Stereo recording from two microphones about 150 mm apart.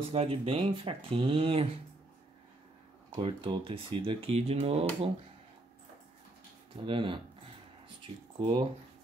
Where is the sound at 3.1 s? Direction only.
35° right (ahead or behind).